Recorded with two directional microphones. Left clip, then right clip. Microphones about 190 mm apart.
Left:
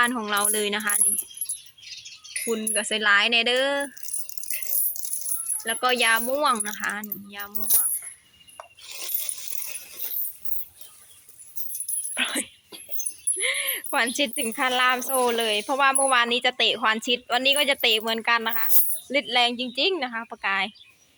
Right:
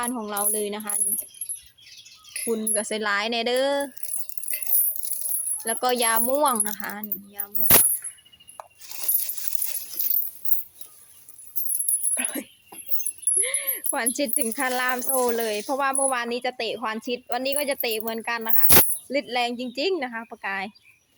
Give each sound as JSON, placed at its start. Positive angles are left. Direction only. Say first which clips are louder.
{"t": 0.0, "sound": "speech", "louder": "left 6 dB", "side_deg": -5}
{"t": 2.5, "sound": "speech", "louder": "even", "side_deg": -20}
{"t": 5.6, "sound": "speech", "louder": "left 2 dB", "side_deg": -20}
{"t": 12.1, "sound": "a sound", "louder": "left 9 dB", "side_deg": -5}
{"t": 13.4, "sound": "speech", "louder": "left 8 dB", "side_deg": -10}